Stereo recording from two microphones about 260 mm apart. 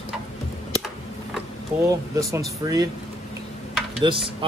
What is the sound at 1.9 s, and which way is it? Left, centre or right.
Speech, centre.